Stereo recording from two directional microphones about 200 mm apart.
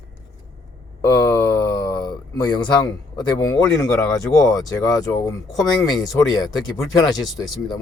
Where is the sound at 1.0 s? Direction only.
15° left (ahead or behind).